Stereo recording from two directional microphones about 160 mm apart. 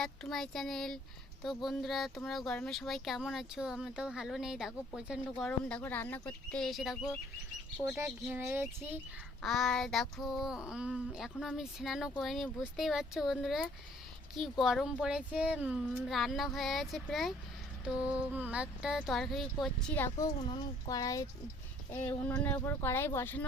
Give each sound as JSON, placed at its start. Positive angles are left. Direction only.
{"t": 0.0, "sound": "speech", "side_deg": 0}
{"t": 5.5, "sound": "speech", "side_deg": 5}
{"t": 9.4, "sound": "speech", "side_deg": 0}
{"t": 20.0, "sound": "speech", "side_deg": 20}
{"t": 22.0, "sound": "speech", "side_deg": 10}